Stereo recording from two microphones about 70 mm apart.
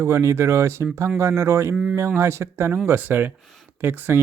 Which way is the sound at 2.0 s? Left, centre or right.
Right.